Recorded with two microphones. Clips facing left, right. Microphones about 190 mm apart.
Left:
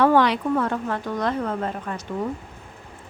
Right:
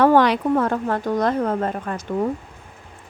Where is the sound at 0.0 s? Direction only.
45° right (ahead or behind).